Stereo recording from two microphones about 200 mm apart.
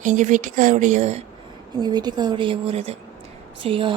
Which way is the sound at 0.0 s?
40° right (ahead or behind).